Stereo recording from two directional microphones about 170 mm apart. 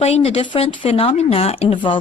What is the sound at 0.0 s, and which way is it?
Speech, 35° left (ahead or behind).